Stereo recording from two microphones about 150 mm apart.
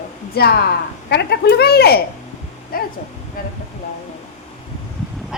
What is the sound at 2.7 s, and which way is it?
Speech, 80° left.